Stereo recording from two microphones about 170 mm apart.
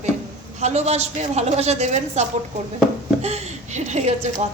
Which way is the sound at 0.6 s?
40° right (ahead or behind).